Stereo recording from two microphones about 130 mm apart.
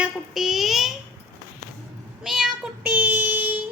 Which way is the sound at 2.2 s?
5° right (ahead or behind).